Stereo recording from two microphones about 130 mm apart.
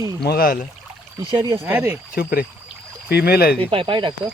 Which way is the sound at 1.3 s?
30° right (ahead or behind).